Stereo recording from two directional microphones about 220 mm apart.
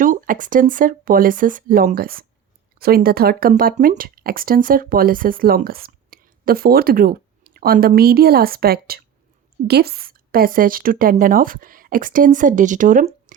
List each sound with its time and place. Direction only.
0.0 s a woman's voice: 35° right (ahead or behind)